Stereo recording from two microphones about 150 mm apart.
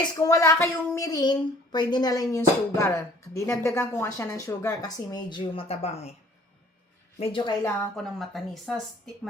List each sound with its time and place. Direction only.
0.0 s speech: 20° left (ahead or behind); by 6.1 s 45° left (ahead or behind)
7.2 s a woman's voice: 35° left (ahead or behind)
7.9 s speech: centre (ahead or behind)